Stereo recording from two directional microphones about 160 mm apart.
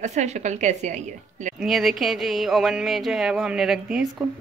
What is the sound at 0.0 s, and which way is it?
A woman's voice, 45° right (ahead or behind).